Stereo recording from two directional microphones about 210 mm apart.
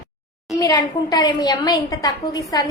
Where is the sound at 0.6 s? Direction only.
20° left (ahead or behind).